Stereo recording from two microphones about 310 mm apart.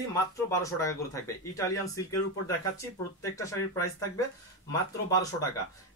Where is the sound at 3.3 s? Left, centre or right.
Centre.